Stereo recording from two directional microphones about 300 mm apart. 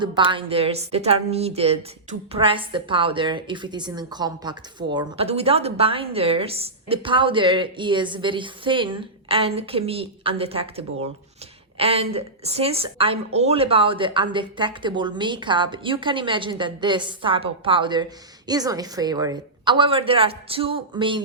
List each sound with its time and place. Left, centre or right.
0.0 s a woman's voice: centre